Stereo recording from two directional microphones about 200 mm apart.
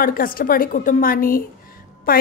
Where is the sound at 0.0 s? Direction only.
45° left (ahead or behind).